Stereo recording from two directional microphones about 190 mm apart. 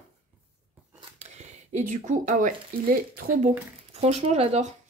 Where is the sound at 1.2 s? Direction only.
35° right (ahead or behind).